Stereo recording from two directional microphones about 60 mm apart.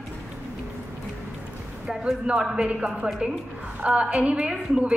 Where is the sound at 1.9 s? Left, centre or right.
Centre.